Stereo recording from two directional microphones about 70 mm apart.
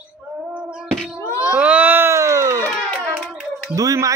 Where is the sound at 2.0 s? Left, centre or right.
Right.